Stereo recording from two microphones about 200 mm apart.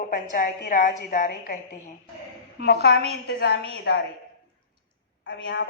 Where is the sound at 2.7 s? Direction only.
55° left (ahead or behind).